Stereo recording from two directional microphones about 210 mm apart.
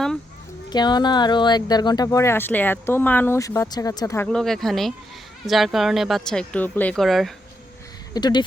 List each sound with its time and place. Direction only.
0.7 s speech: 20° left (ahead or behind)
4.3 s speech: centre (ahead or behind)
8.1 s speech: 20° left (ahead or behind)